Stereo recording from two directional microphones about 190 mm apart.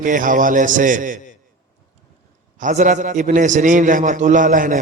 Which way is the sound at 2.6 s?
45° right (ahead or behind).